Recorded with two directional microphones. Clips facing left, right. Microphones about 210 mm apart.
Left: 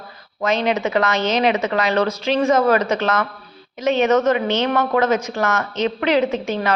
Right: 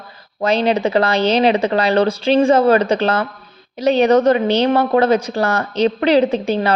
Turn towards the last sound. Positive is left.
turn(degrees=-30)  # may be behind; listen again after turning